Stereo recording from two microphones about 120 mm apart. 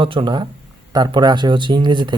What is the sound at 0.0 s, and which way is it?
Speech, 45° right (ahead or behind).